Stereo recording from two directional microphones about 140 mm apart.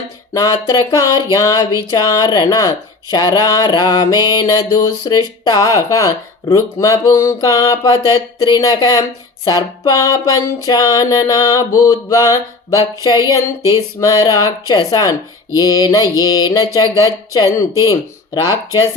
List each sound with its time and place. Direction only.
0.3 s speech: 25° left (ahead or behind)